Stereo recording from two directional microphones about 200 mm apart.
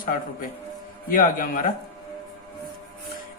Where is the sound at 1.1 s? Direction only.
45° left (ahead or behind).